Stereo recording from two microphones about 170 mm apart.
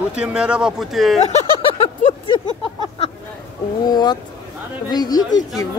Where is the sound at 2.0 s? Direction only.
30° left (ahead or behind).